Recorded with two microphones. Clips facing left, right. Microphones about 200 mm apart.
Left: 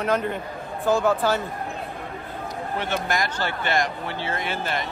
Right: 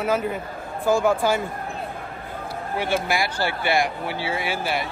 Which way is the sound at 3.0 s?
10° right (ahead or behind).